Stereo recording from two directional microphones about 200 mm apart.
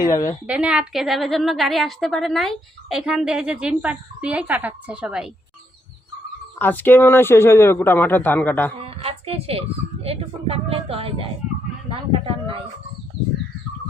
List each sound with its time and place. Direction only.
0.0 s speech: 20° left (ahead or behind)
0.4 s a woman's voice: 5° right (ahead or behind)
6.6 s a man's voice: 10° left (ahead or behind)
8.8 s speech: 30° right (ahead or behind)